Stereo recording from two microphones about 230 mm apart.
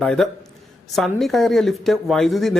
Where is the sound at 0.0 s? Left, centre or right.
Centre.